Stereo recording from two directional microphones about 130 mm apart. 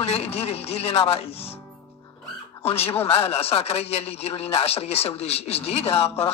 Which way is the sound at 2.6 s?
50° left (ahead or behind).